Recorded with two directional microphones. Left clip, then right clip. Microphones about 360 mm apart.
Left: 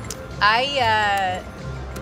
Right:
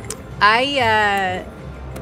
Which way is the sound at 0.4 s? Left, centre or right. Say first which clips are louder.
Right 3 dB; centre.